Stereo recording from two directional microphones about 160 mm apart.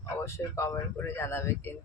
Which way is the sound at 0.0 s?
20° left (ahead or behind).